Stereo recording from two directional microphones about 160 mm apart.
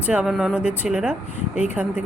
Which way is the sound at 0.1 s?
5° right (ahead or behind).